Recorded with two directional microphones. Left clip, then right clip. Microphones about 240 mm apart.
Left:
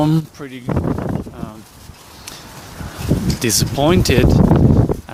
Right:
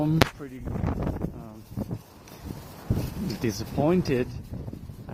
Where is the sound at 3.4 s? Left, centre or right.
Centre.